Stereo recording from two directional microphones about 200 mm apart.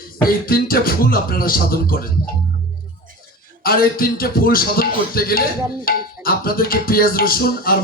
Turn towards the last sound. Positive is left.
turn(degrees=45)  # may be behind; listen again after turning